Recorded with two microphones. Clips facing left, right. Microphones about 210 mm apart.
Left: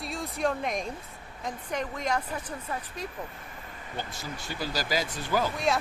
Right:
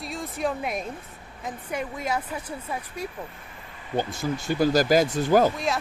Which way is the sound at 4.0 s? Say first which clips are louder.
Right 11 dB; 50° right (ahead or behind).